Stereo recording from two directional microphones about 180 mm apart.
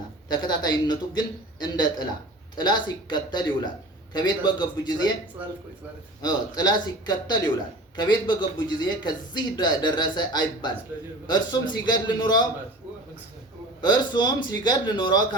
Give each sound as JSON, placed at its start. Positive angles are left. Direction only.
{"t": 0.3, "sound": "speech", "side_deg": 25}
{"t": 5.4, "sound": "speech", "side_deg": -10}
{"t": 6.2, "sound": "speech", "side_deg": 25}
{"t": 13.8, "sound": "speech", "side_deg": 25}